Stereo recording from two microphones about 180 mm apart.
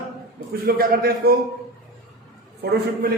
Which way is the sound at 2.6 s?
65° right (ahead or behind).